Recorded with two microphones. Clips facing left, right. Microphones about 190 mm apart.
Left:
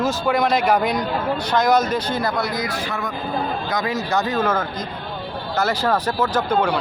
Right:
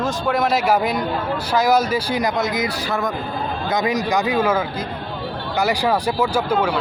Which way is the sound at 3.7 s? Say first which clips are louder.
Right 5 dB; 20° right (ahead or behind).